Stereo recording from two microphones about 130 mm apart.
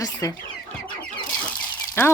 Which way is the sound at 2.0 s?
20° left (ahead or behind).